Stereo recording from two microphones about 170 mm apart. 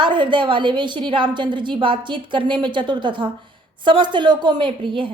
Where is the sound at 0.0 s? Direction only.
30° right (ahead or behind).